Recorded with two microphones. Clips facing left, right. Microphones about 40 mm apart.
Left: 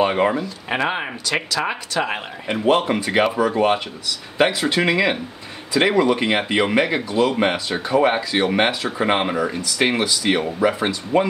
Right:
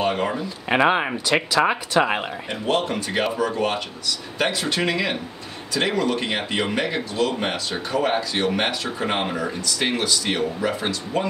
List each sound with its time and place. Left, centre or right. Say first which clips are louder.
0.0 s speech: left 5 dB; left
0.4 s speech: right 3 dB; centre
2.4 s speech: left 8 dB; centre